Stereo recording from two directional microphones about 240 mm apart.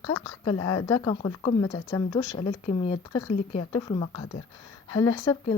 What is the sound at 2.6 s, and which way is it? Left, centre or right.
A woman's voice, left.